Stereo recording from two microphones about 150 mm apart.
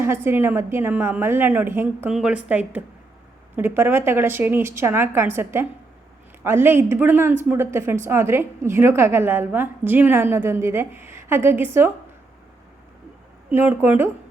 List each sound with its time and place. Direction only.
0.0 s a woman's voice: 15° right (ahead or behind)
13.5 s a woman's voice: 15° right (ahead or behind)